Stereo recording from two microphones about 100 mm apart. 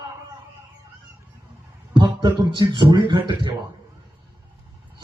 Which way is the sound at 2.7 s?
50° right (ahead or behind).